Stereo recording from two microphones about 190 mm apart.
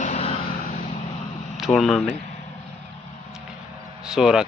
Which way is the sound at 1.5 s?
Centre (ahead or behind).